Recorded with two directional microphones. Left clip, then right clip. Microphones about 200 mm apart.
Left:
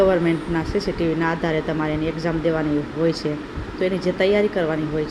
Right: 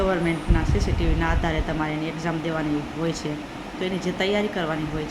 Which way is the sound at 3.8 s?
5° left (ahead or behind).